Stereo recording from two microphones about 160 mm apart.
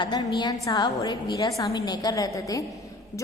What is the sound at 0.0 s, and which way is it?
A man's voice, 25° left (ahead or behind).